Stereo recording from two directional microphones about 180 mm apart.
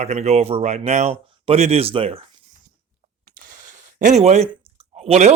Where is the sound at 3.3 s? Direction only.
50° right (ahead or behind).